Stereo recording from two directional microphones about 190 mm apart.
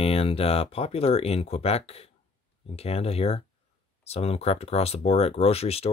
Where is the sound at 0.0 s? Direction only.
30° left (ahead or behind).